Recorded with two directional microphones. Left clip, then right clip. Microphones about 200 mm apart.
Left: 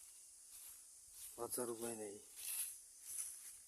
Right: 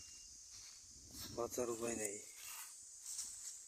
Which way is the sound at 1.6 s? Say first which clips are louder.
Right 4 dB; 10° right (ahead or behind).